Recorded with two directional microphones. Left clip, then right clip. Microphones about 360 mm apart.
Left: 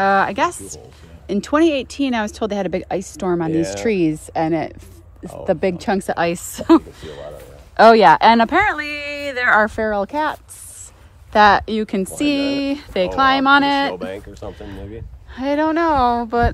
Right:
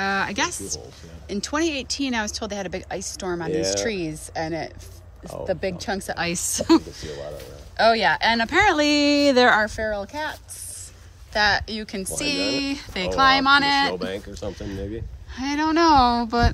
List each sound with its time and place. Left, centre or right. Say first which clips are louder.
0.0 s speech: left 8 dB; centre
3.3 s speech: left 7 dB; left
3.5 s a woman's voice: left 5 dB; centre
9.6 s speech: left 6 dB; centre
11.3 s a woman's voice: left 9 dB; centre
14.0 s speech: left 1 dB; left
14.5 s a woman's voice: right 1 dB; centre